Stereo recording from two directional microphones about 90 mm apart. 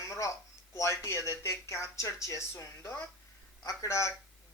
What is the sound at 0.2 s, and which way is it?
Speech, 35° left (ahead or behind).